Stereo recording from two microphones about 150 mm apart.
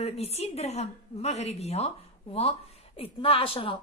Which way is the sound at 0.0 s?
45° left (ahead or behind).